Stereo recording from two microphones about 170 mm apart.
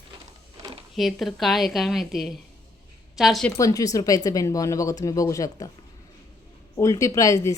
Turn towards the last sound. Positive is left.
turn(degrees=20)  # may be behind; listen again after turning